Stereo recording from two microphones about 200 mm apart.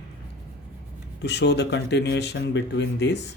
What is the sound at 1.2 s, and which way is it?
Speech, 60° left (ahead or behind).